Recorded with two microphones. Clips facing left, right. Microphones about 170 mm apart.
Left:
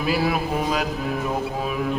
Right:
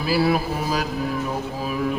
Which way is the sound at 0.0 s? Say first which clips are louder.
Right 2 dB; 35° right (ahead or behind).